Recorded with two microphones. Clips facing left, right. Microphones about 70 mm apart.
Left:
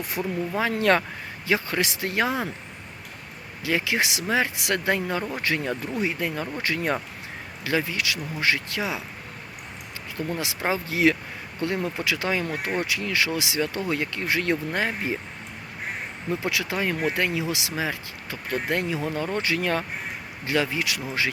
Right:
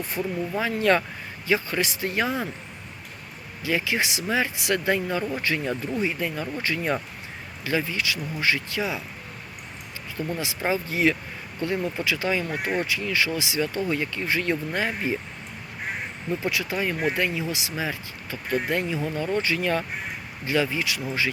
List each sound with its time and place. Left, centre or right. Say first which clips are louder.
0.8 s speech: right 1 dB; left
3.6 s speech: left 1 dB; left
10.3 s speech: right 1 dB; left
16.4 s speech: even; left